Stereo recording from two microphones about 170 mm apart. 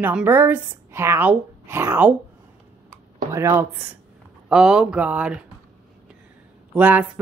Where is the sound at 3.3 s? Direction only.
15° right (ahead or behind).